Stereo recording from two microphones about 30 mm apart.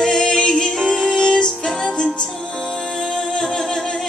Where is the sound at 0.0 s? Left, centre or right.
Left.